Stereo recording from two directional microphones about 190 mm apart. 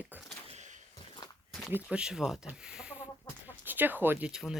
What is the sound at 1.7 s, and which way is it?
Speech, 5° right (ahead or behind).